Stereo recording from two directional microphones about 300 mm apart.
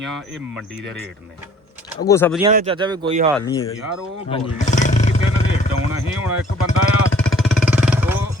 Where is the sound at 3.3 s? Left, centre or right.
Centre.